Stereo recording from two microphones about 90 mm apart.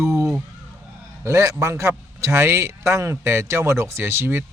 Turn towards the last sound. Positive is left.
turn(degrees=-25)  # may be behind; listen again after turning